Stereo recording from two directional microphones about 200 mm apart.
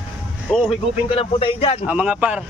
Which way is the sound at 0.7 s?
30° left (ahead or behind).